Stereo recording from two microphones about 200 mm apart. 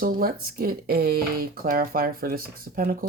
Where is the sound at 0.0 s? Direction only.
50° right (ahead or behind).